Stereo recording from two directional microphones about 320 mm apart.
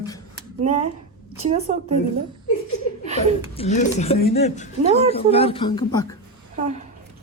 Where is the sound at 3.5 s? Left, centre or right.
Left.